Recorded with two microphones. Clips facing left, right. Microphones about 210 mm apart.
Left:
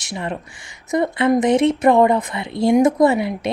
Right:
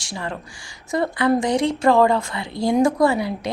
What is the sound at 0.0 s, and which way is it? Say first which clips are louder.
A woman's voice: left 3 dB; 20° left (ahead or behind).